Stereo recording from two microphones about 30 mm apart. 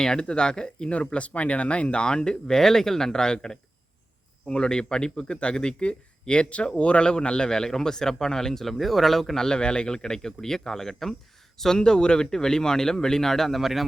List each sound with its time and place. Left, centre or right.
0.0 s a man's voice: left
0.9 s speech: left
2.6 s a man's voice: centre
8.8 s speech: centre
9.5 s a man's voice: left; by 11.8 s centre
11.8 s a man's voice: left
13.5 s speech: centre